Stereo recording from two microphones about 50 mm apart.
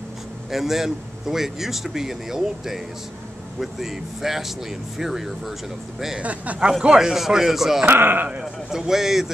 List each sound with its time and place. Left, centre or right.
0.5 s speech: centre
6.2 s speech: right
7.0 s speech: centre
7.8 s speech: right
8.4 s speech: centre